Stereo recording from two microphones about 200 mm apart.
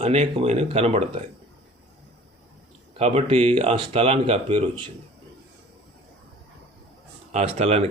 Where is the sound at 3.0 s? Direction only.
30° right (ahead or behind).